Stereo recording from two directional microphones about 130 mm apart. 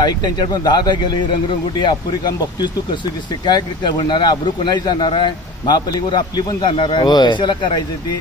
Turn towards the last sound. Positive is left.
turn(degrees=35)  # may be behind; listen again after turning